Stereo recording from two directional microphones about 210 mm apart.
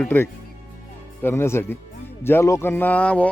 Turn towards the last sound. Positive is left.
turn(degrees=5)  # may be behind; listen again after turning